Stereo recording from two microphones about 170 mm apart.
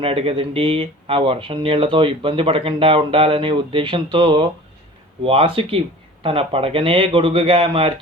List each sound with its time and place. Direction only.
0.0 s speech: 35° right (ahead or behind)